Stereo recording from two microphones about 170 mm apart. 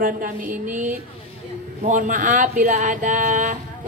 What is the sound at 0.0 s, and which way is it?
A woman's voice, 55° right (ahead or behind).